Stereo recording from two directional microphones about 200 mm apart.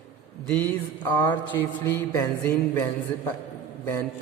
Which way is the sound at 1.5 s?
15° left (ahead or behind).